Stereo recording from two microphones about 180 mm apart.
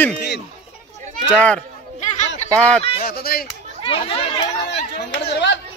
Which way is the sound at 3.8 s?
30° left (ahead or behind).